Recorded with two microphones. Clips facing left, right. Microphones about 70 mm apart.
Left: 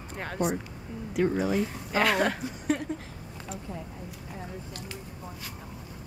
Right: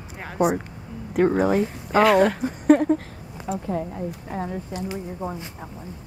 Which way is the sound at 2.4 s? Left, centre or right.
Right.